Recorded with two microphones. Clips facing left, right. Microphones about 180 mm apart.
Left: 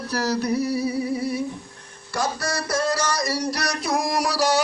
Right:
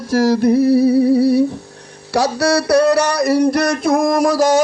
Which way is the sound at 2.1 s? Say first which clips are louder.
Right 11 dB; 75° right (ahead or behind).